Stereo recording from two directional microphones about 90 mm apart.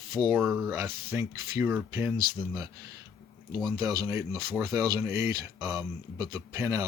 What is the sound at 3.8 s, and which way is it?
Speech, 45° right (ahead or behind).